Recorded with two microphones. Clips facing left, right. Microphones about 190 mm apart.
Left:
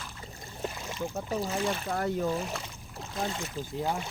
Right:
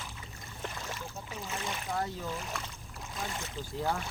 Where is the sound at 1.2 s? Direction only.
35° left (ahead or behind).